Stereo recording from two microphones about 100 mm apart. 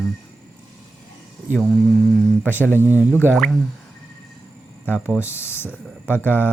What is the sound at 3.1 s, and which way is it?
Speech, 20° left (ahead or behind).